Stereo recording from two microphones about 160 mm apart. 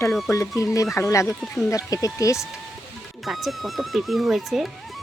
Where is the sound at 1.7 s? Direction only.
20° left (ahead or behind).